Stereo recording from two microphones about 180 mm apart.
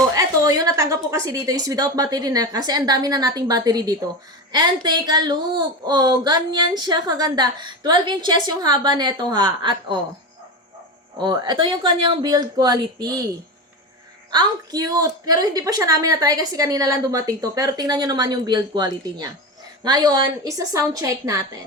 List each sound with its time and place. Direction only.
0.1 s a woman's voice: 20° right (ahead or behind)
11.2 s a woman's voice: 25° right (ahead or behind)
14.3 s a woman's voice: 20° right (ahead or behind)